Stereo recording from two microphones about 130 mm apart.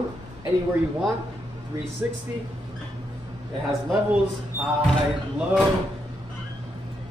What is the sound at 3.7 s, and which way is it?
Speech, 5° right (ahead or behind).